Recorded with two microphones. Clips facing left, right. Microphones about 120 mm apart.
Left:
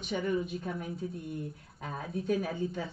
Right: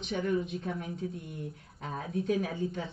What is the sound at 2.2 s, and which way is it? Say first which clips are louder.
Speech: even; centre (ahead or behind).